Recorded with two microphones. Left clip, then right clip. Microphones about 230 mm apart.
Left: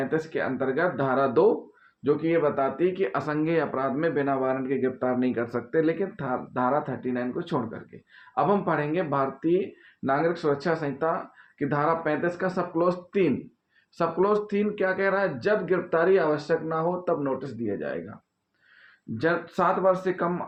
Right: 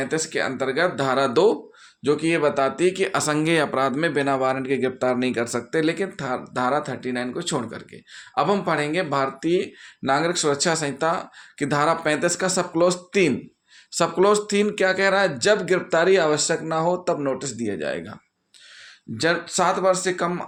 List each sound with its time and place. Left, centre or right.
0.0 s speech: right
2.0 s speech: right
19.1 s speech: right